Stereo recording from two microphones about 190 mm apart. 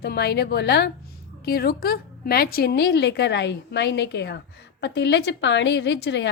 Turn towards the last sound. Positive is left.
turn(degrees=65)  # may be behind; listen again after turning